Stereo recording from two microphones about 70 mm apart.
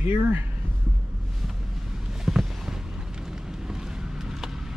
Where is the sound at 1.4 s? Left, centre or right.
Centre.